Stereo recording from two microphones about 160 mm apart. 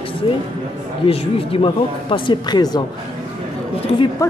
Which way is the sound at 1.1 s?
35° left (ahead or behind).